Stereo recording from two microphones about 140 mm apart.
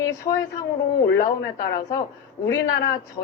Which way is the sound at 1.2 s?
25° left (ahead or behind).